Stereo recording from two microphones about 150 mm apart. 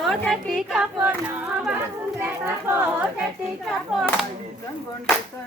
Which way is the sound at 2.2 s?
15° right (ahead or behind).